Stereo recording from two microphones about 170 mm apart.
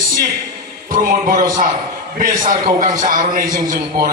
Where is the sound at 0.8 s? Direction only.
50° right (ahead or behind).